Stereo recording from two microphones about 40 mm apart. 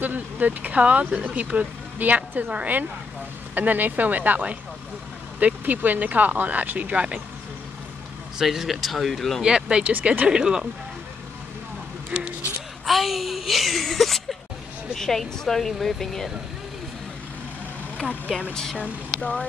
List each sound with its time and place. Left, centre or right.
0.0 s speech: right
8.4 s speech: centre
9.4 s speech: right
12.1 s speech: right
12.8 s speech: centre
18.3 s speech: centre